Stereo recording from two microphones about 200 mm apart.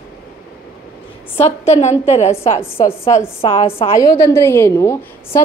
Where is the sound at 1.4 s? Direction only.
30° left (ahead or behind).